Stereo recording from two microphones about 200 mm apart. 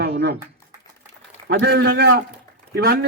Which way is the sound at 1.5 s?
55° right (ahead or behind).